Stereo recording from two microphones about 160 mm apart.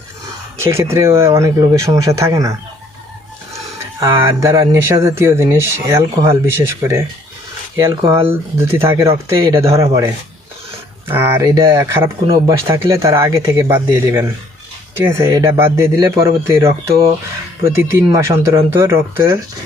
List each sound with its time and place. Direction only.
0.6 s speech: 15° right (ahead or behind)
4.0 s speech: 20° right (ahead or behind)
11.1 s speech: 15° right (ahead or behind)